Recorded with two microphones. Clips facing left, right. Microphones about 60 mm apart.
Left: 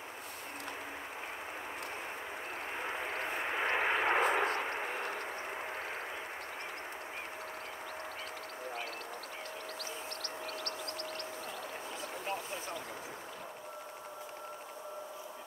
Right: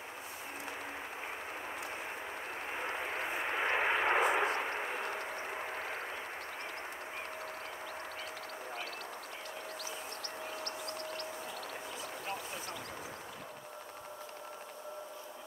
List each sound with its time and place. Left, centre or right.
2.7 s vehicle: centre
4.6 s a sound: centre
5.1 s vehicle: centre